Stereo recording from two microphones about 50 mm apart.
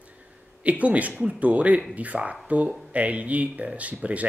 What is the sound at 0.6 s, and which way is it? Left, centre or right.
Speech, right.